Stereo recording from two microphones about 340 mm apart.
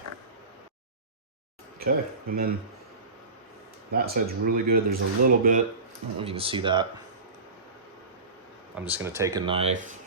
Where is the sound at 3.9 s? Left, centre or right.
Right.